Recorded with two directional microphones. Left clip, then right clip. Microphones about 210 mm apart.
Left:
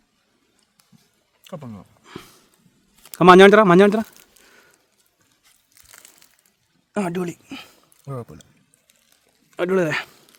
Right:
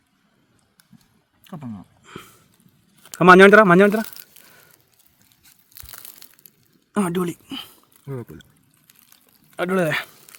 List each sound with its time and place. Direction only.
1.5 s a sound: 20° left (ahead or behind)
3.2 s speech: 15° left (ahead or behind)
5.7 s crumpling: 35° right (ahead or behind)
6.9 s a sound: centre (ahead or behind)
8.0 s speech: 30° left (ahead or behind)
9.5 s speech: 5° left (ahead or behind)